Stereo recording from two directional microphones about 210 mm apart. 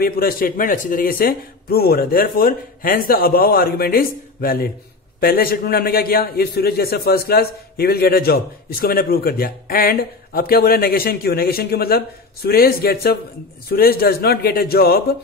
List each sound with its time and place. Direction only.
0.0 s a man's voice: 45° left (ahead or behind)